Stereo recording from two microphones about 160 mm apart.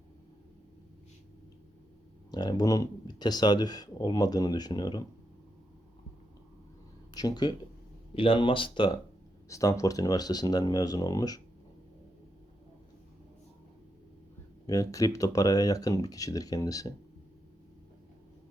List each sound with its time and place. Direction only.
2.3 s speech: 25° left (ahead or behind)
7.1 s speech: 25° left (ahead or behind)
9.5 s speech: 20° left (ahead or behind)
14.7 s speech: 20° left (ahead or behind)